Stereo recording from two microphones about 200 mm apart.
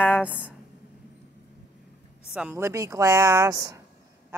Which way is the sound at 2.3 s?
10° right (ahead or behind).